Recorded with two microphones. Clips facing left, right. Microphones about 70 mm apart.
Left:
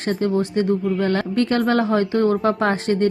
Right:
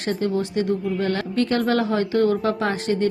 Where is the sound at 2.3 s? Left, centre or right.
Left.